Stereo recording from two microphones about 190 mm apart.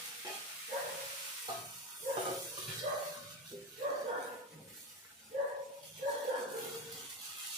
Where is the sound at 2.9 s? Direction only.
40° right (ahead or behind).